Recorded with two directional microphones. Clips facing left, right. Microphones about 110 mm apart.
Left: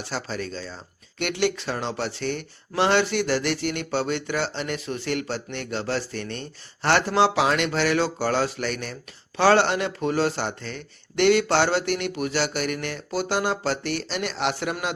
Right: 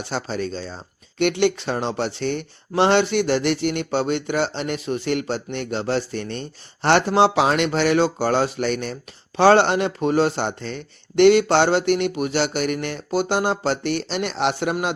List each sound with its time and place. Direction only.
0.0 s speech: 25° right (ahead or behind)